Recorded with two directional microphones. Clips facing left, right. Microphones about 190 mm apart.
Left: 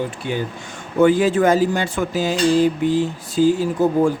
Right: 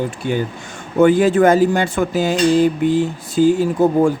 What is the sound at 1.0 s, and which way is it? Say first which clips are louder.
Speech: right 3 dB; 55° right (ahead or behind).